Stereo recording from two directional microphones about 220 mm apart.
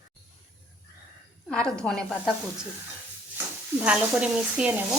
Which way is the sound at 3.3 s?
5° right (ahead or behind).